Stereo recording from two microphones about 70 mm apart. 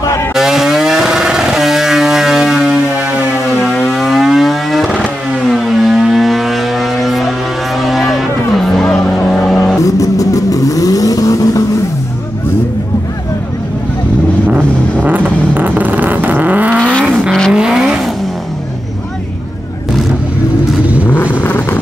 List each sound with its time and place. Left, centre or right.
0.3 s vehicle: centre
3.8 s a sound: centre
5.5 s vehicle: centre
9.8 s vehicle: left
15.0 s vehicle: right
17.5 s vehicle: centre
21.4 s vehicle: left